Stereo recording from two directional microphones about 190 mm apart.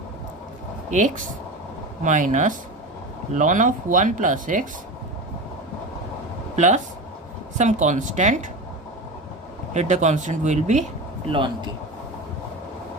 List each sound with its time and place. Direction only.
0.9 s speech: 40° right (ahead or behind)
6.6 s speech: 40° right (ahead or behind)
9.7 s speech: 40° right (ahead or behind)
11.3 s speech: 25° right (ahead or behind)